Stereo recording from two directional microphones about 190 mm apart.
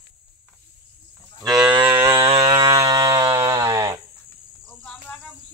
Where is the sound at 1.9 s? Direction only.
15° right (ahead or behind).